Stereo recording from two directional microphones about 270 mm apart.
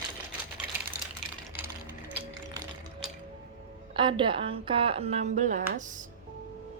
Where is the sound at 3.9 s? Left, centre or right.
Centre.